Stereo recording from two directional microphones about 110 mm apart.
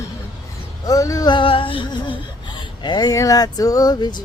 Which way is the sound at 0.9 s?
30° left (ahead or behind).